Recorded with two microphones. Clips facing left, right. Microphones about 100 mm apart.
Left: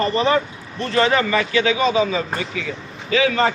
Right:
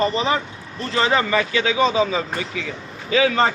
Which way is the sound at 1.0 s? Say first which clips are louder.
Left 1 dB; 25° right (ahead or behind).